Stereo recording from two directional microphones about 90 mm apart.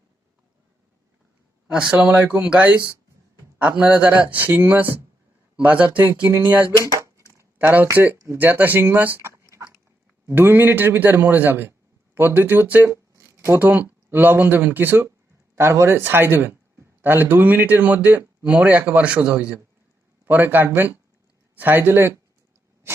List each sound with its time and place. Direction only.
1.6 s speech: 10° right (ahead or behind)
6.7 s speech: 40° right (ahead or behind)
7.3 s a sound: 20° right (ahead or behind)
7.9 s speech: 20° right (ahead or behind)
9.4 s dog: 35° right (ahead or behind)
10.2 s speech: 25° right (ahead or behind)
12.9 s a sound: 30° right (ahead or behind)
13.6 s speech: 20° right (ahead or behind)